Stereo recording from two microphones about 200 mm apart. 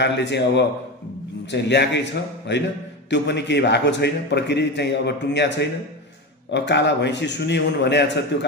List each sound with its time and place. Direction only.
0.0 s a man's voice: 60° left (ahead or behind)